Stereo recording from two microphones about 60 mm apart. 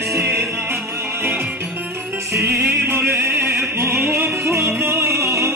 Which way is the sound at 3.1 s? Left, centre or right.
Right.